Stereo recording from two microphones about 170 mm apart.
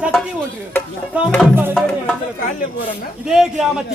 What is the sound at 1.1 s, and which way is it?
Speech, 10° right (ahead or behind).